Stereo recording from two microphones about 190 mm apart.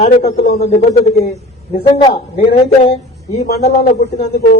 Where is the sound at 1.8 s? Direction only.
25° left (ahead or behind).